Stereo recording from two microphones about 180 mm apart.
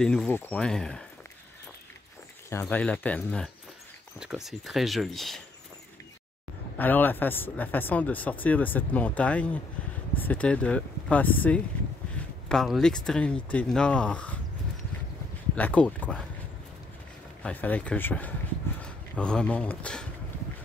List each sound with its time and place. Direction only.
0.0 s speech: 5° left (ahead or behind)
2.6 s speech: 5° left (ahead or behind)
6.8 s speech: 10° left (ahead or behind)
15.5 s speech: 10° left (ahead or behind)
17.4 s speech: 10° left (ahead or behind)